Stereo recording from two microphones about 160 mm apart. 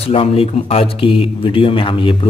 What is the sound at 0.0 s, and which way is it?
Speech, 35° left (ahead or behind).